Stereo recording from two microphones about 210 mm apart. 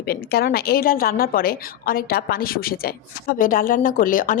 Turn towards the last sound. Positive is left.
turn(degrees=40)  # may be behind; listen again after turning